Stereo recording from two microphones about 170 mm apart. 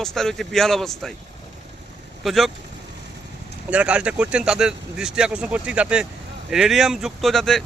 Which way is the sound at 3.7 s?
5° right (ahead or behind).